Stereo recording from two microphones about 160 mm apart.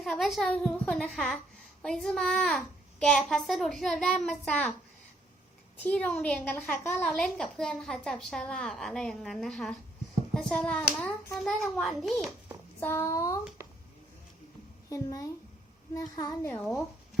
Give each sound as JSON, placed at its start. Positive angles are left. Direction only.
{"t": 0.0, "sound": "a woman's voice", "side_deg": 0}
{"t": 5.8, "sound": "a woman's voice", "side_deg": 10}
{"t": 12.8, "sound": "a sound", "side_deg": 15}
{"t": 14.8, "sound": "a child's voice", "side_deg": 20}